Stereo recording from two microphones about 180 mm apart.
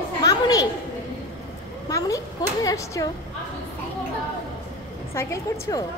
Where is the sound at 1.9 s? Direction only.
20° left (ahead or behind).